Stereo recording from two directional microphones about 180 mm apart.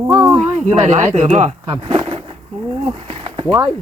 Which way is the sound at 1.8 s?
30° right (ahead or behind).